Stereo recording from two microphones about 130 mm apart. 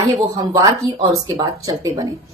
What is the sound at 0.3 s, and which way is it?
A woman's voice, 35° right (ahead or behind).